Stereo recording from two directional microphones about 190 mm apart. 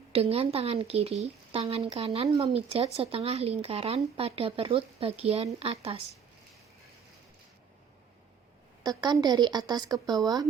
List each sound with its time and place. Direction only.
0.1 s speech: 30° right (ahead or behind)
8.8 s a woman's voice: 20° right (ahead or behind)